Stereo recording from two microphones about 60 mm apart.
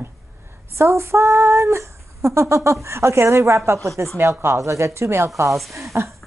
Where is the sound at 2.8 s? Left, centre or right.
Right.